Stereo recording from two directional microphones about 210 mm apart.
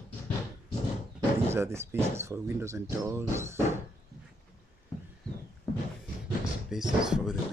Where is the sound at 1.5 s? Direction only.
10° right (ahead or behind).